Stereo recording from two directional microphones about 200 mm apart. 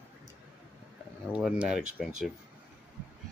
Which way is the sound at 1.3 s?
5° right (ahead or behind).